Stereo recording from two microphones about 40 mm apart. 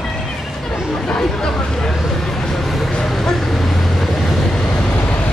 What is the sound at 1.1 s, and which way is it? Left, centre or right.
Speech, centre.